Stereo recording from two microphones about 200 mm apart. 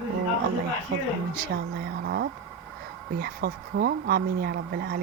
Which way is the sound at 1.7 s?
55° right (ahead or behind).